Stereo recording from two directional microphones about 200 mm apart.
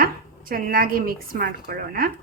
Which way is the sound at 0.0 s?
45° right (ahead or behind).